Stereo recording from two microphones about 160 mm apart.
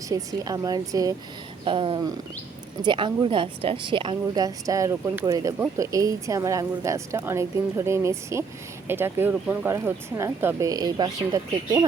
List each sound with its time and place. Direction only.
0.1 s speech: 20° right (ahead or behind)
1.6 s a sound: 30° right (ahead or behind)
2.8 s speech: 30° right (ahead or behind)